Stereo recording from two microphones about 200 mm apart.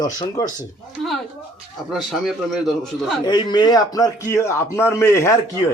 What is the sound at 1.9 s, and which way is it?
Speech, centre (ahead or behind).